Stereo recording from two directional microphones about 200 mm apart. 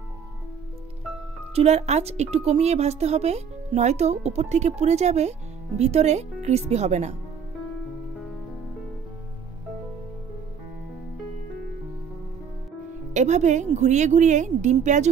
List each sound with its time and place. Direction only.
1.5 s a woman's voice: 30° right (ahead or behind)
13.1 s a woman's voice: 35° right (ahead or behind)